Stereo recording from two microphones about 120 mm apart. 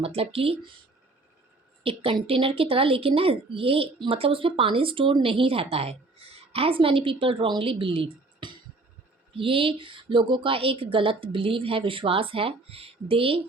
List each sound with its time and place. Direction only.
0.0 s a woman's voice: 55° right (ahead or behind)
1.8 s a woman's voice: 50° right (ahead or behind)